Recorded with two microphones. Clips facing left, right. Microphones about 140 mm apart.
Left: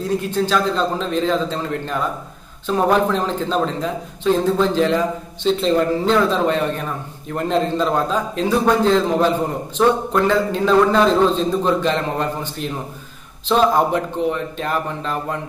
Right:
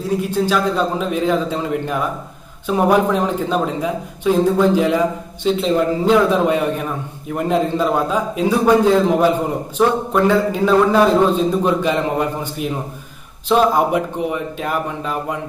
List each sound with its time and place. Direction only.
0.3 s a man's voice: 10° right (ahead or behind)